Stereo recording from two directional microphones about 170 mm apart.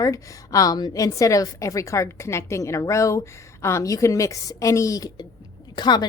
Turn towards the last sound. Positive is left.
turn(degrees=25)  # may be behind; listen again after turning